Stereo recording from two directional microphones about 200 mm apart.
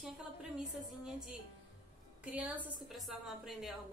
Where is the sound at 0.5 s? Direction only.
5° right (ahead or behind).